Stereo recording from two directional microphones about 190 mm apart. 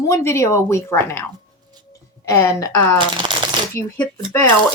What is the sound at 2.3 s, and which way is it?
A woman's voice, 15° left (ahead or behind).